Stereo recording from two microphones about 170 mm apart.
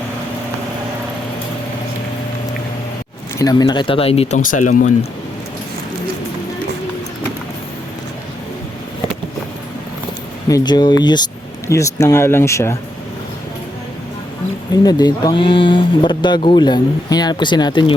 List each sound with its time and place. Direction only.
3.3 s speech: 20° left (ahead or behind)
4.4 s speech: 50° left (ahead or behind)
10.5 s speech: 25° left (ahead or behind)
14.8 s speech: 25° left (ahead or behind)